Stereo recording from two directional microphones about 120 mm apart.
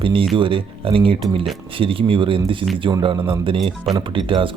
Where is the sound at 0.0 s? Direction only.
45° right (ahead or behind).